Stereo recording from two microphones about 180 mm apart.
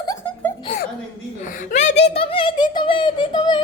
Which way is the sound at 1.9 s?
75° left (ahead or behind).